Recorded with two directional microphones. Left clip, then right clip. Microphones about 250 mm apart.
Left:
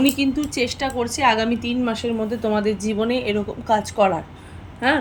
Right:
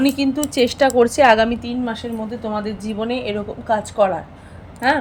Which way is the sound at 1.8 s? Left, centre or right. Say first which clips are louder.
Left 2 dB; centre.